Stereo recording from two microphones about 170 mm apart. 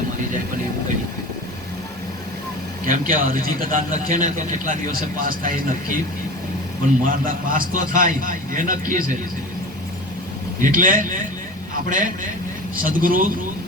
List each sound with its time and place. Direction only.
2.8 s a man's voice: 55° right (ahead or behind)
7.0 s a man's voice: 55° right (ahead or behind)
10.6 s a man's voice: 55° right (ahead or behind)